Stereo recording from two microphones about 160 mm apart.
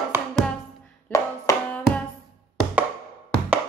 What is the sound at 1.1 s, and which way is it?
Music, 15° left (ahead or behind).